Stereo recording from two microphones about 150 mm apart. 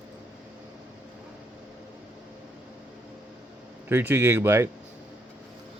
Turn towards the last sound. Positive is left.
turn(degrees=-15)  # may be behind; listen again after turning